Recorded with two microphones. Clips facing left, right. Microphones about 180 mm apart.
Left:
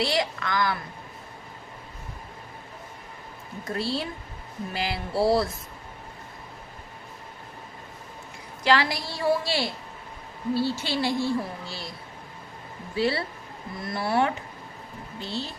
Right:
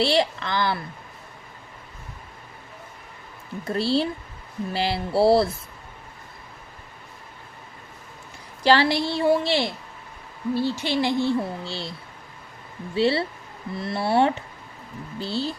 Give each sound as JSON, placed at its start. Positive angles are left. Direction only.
{"t": 0.0, "sound": "speech", "side_deg": -30}
{"t": 3.6, "sound": "speech", "side_deg": -30}
{"t": 8.6, "sound": "speech", "side_deg": -30}
{"t": 13.0, "sound": "speech", "side_deg": -25}